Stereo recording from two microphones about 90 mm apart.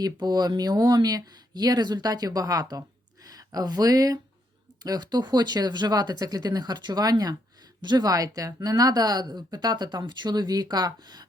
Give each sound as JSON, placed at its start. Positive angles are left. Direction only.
{"t": 0.0, "sound": "speech", "side_deg": -50}